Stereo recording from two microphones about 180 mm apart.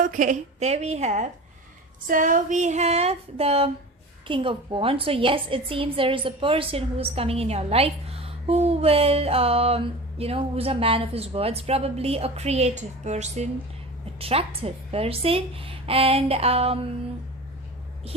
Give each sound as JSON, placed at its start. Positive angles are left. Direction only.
{"t": 0.0, "sound": "a woman's voice", "side_deg": -45}
{"t": 2.0, "sound": "a woman's voice", "side_deg": -50}